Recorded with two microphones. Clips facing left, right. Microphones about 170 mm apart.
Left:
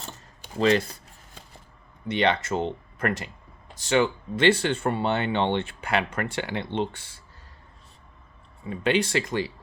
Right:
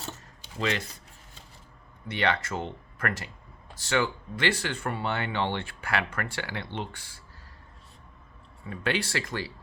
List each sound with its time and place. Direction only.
0.6 s speech: 35° left (ahead or behind)
2.0 s speech: 20° left (ahead or behind)
8.7 s speech: 20° left (ahead or behind)